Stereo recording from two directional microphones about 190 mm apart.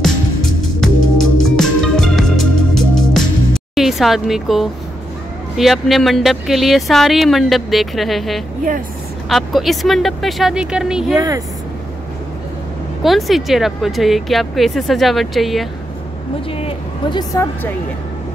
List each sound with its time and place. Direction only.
0.0 s music: 5° left (ahead or behind)
5.6 s speech: centre (ahead or behind)
11.1 s speech: 20° right (ahead or behind)
13.0 s speech: centre (ahead or behind)
16.5 s a woman's voice: 25° left (ahead or behind)